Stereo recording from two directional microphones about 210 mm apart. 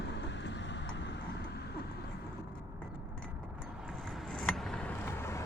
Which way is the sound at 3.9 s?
Centre (ahead or behind).